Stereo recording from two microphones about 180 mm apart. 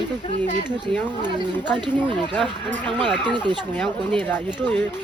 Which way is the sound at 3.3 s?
25° right (ahead or behind).